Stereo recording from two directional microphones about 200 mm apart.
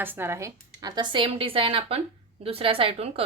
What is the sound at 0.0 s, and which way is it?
Speech, 10° right (ahead or behind).